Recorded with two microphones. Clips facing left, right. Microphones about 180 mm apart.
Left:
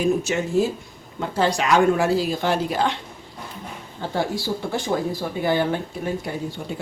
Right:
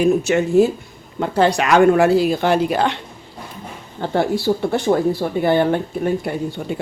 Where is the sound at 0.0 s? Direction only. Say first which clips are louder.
Right 6 dB; 65° right (ahead or behind).